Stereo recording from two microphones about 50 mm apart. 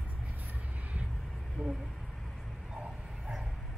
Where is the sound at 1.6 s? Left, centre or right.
Right.